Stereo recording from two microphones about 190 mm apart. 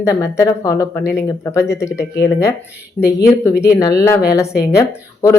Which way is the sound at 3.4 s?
15° left (ahead or behind).